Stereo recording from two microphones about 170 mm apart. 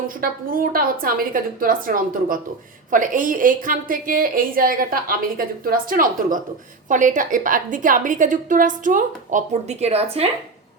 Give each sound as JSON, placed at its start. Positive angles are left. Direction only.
{"t": 0.2, "sound": "a woman's voice", "side_deg": -60}